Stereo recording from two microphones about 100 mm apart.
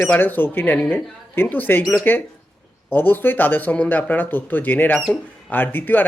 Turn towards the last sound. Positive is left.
turn(degrees=20)  # may be behind; listen again after turning